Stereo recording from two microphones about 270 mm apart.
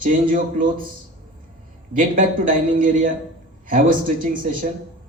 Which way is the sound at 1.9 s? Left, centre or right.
Right.